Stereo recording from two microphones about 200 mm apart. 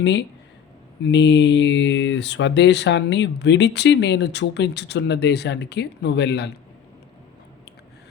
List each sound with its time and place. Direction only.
0.0 s speech: 60° left (ahead or behind)